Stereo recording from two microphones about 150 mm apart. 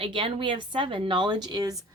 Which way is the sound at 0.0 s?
35° right (ahead or behind).